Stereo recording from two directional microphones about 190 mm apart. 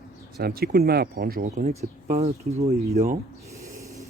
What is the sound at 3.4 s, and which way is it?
Snort, 15° right (ahead or behind).